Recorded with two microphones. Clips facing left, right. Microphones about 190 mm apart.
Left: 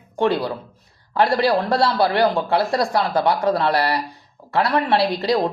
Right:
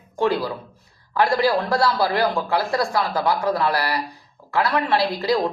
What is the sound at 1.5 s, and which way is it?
A man's voice, 20° left (ahead or behind).